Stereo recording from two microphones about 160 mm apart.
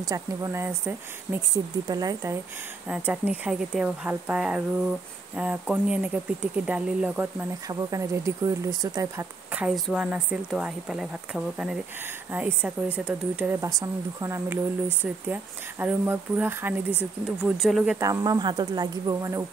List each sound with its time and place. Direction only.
0.1 s speech: 20° right (ahead or behind)
2.9 s speech: 5° right (ahead or behind)
7.6 s speech: 20° right (ahead or behind)
9.5 s speech: 10° right (ahead or behind)
17.4 s speech: centre (ahead or behind)
17.9 s speech: 20° right (ahead or behind)